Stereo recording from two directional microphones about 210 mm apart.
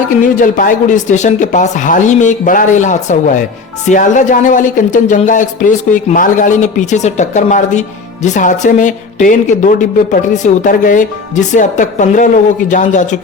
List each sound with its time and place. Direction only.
0.2 s speech: 40° left (ahead or behind)